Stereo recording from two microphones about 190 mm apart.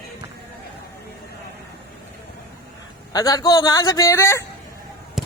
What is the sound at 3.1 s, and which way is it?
A man's voice, 20° left (ahead or behind).